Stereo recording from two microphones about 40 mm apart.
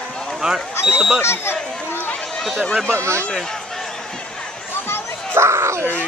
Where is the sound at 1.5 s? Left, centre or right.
Left.